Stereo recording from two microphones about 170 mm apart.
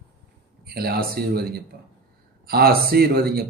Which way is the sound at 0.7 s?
65° right (ahead or behind).